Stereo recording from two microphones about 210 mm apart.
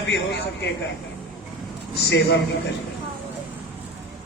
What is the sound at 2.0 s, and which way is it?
Speech, 55° left (ahead or behind).